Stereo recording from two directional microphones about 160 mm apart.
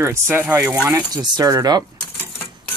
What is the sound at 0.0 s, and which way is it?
Speech, 15° right (ahead or behind).